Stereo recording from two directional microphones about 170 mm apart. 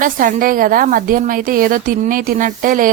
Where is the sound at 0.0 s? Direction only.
55° right (ahead or behind).